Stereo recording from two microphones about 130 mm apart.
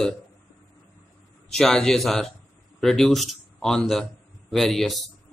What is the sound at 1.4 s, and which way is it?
A man's voice, 5° left (ahead or behind).